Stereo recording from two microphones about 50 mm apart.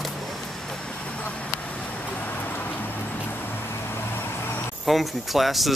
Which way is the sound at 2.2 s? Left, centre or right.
Left.